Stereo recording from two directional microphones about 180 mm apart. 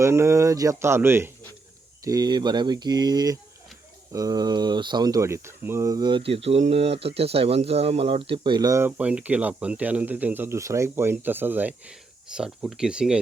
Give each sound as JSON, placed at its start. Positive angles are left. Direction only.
{"t": 0.0, "sound": "speech", "side_deg": -15}